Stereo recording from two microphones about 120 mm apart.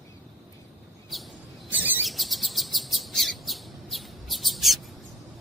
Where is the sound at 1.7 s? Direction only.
15° right (ahead or behind).